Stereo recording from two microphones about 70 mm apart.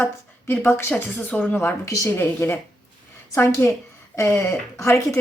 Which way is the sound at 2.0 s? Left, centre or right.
Left.